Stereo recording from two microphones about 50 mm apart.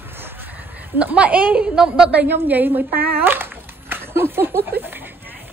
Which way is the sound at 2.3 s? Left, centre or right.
Right.